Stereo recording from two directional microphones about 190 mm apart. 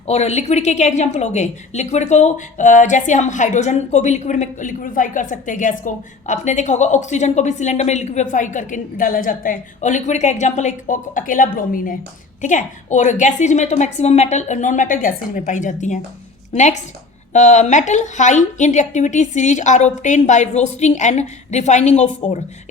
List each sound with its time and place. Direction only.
0.1 s a woman's voice: 35° left (ahead or behind)
17.3 s a woman's voice: 40° left (ahead or behind)